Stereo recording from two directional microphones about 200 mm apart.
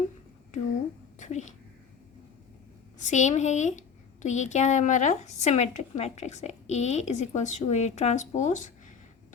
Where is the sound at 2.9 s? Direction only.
35° left (ahead or behind).